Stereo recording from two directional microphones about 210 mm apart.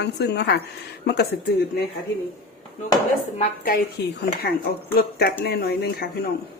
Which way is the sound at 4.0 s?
50° left (ahead or behind).